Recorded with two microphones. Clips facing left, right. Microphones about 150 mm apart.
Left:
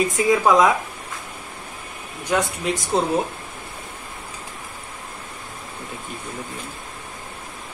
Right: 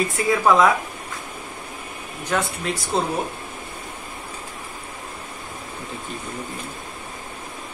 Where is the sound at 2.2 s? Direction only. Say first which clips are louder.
Left 2 dB; 15° left (ahead or behind).